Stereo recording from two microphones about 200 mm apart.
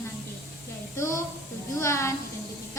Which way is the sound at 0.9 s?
15° left (ahead or behind).